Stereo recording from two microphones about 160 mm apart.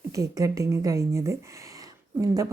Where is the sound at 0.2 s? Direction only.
20° right (ahead or behind).